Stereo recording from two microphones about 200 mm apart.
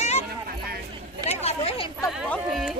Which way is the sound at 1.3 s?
30° left (ahead or behind).